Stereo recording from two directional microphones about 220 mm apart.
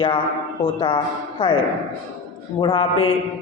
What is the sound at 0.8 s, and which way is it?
Speech, 20° left (ahead or behind).